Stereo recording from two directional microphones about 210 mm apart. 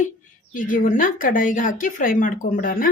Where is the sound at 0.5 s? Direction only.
40° left (ahead or behind).